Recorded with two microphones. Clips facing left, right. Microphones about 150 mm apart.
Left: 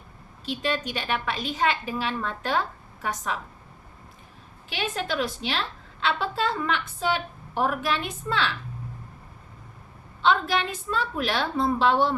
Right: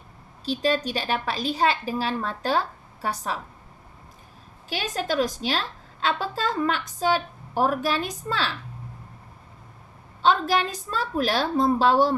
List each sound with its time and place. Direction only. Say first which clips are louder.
0.4 s a woman's voice: right 4 dB; 35° right (ahead or behind)
4.7 s a woman's voice: right 2 dB; 40° right (ahead or behind)
10.2 s a woman's voice: right 2 dB; 40° right (ahead or behind)